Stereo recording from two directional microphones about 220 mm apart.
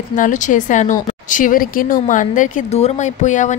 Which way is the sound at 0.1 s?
35° left (ahead or behind).